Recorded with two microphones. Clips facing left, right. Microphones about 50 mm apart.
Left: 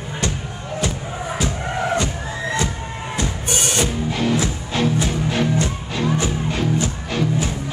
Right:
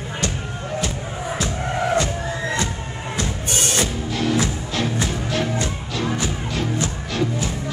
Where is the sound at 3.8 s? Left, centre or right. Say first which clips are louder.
Left 2 dB; left.